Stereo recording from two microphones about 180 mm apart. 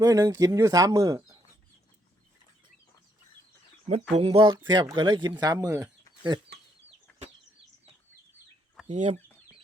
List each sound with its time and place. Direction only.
0.0 s speech: 20° right (ahead or behind)
4.1 s speech: 30° right (ahead or behind)
8.9 s speech: 35° right (ahead or behind)